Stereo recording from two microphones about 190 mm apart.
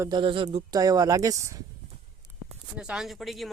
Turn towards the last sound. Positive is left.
turn(degrees=0)  # may be behind; listen again after turning